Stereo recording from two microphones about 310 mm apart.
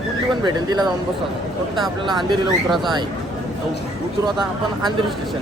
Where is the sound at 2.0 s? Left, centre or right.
Centre.